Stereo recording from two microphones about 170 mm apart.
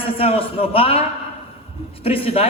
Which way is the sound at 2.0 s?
35° left (ahead or behind).